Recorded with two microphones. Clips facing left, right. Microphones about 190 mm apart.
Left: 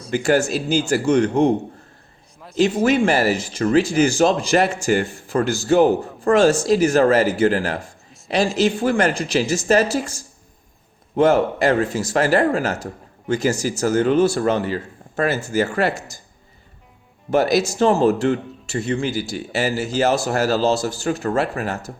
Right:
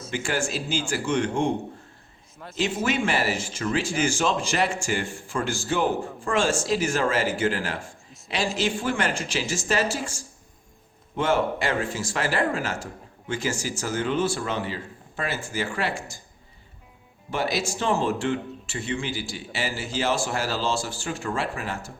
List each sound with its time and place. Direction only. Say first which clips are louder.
0.1 s speech: left 10 dB; 40° left (ahead or behind)
2.6 s speech: left 9 dB; 40° left (ahead or behind)
17.3 s speech: left 9 dB; 45° left (ahead or behind)